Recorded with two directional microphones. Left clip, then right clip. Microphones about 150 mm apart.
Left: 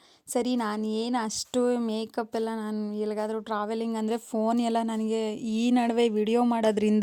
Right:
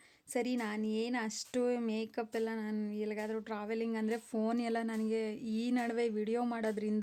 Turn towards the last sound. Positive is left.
turn(degrees=55)  # may be behind; listen again after turning